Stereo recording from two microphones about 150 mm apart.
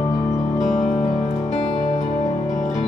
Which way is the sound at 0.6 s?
55° left (ahead or behind).